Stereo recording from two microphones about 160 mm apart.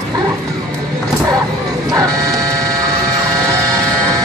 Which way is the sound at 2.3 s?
20° right (ahead or behind).